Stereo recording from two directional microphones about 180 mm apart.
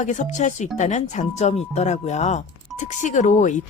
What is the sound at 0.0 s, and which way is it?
Speech, 40° left (ahead or behind).